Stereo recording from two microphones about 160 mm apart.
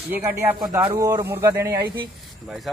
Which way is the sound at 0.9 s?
25° right (ahead or behind).